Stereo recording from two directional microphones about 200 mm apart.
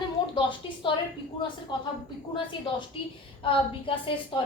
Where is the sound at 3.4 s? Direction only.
25° left (ahead or behind).